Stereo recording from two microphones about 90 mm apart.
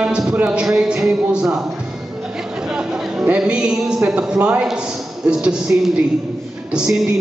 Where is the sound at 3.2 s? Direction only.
15° right (ahead or behind).